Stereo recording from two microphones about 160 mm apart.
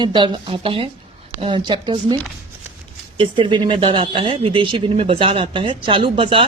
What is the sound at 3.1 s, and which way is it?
Speech, 30° right (ahead or behind).